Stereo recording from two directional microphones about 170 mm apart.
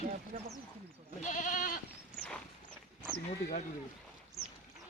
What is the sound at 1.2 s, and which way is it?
Goat, 45° left (ahead or behind).